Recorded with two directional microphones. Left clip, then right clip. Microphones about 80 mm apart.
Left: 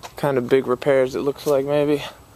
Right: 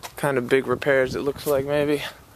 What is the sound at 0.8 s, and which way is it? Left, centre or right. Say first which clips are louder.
Speech: left 2 dB; left.